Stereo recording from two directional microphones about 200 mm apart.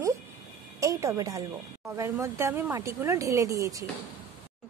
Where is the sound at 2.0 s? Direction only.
15° right (ahead or behind).